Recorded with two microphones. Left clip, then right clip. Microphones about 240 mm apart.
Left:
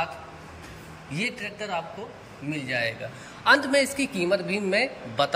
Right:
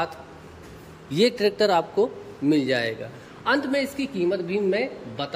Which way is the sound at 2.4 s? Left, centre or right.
Right.